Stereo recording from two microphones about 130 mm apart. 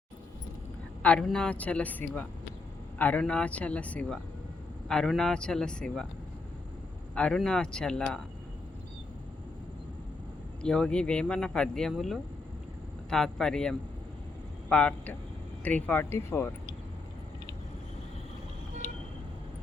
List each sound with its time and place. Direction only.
1.0 s speech: 5° left (ahead or behind)
7.2 s speech: 5° left (ahead or behind)
10.6 s speech: 5° left (ahead or behind)